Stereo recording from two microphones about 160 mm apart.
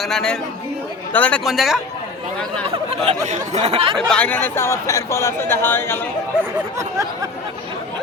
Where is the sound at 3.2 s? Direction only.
45° right (ahead or behind).